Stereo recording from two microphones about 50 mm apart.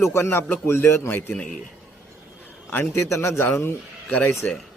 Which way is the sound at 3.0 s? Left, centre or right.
Left.